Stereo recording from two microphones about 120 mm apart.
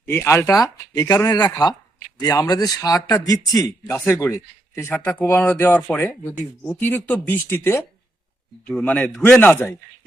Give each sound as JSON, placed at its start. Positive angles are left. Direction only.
{"t": 0.0, "sound": "speech", "side_deg": 20}
{"t": 8.6, "sound": "speech", "side_deg": 10}
{"t": 9.4, "sound": "speech", "side_deg": 15}